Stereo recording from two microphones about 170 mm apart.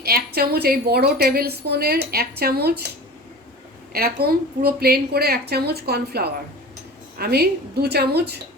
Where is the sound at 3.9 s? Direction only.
60° right (ahead or behind).